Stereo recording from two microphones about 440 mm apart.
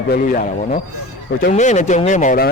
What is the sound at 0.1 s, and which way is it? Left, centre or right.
Speech, centre.